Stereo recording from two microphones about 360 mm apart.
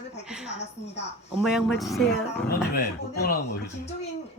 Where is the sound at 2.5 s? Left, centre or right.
Left.